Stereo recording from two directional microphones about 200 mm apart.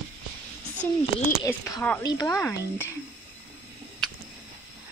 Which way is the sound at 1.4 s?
15° left (ahead or behind).